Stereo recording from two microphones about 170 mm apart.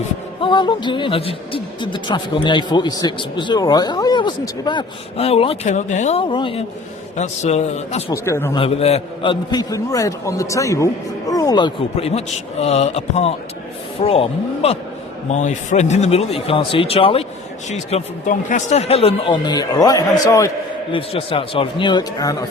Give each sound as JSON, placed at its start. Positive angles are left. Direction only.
{"t": 0.4, "sound": "a man's voice", "side_deg": 25}
{"t": 8.1, "sound": "a man's voice", "side_deg": 15}
{"t": 8.5, "sound": "a man's voice", "side_deg": 35}
{"t": 20.9, "sound": "a man's voice", "side_deg": 35}